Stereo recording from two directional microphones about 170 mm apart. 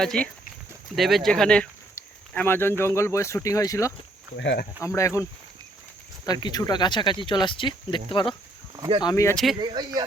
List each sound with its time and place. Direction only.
0.0 s speech: 5° left (ahead or behind); by 3.9 s 20° left (ahead or behind)
4.4 s speech: 90° left
4.8 s speech: 15° left (ahead or behind)
6.2 s speech: 25° left (ahead or behind)
8.7 s cricket: 25° right (ahead or behind)
9.0 s speech: 20° left (ahead or behind)
9.3 s speech: centre (ahead or behind)
9.6 s speech: 25° right (ahead or behind)